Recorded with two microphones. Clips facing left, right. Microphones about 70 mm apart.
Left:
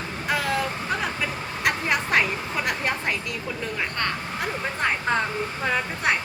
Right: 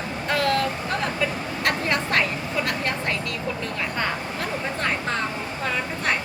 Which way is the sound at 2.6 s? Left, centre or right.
Centre.